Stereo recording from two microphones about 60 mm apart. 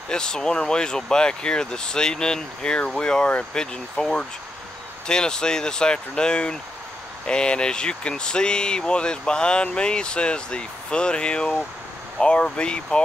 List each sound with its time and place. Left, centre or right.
0.1 s speech: centre